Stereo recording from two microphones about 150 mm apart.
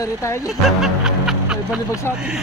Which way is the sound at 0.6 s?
5° right (ahead or behind).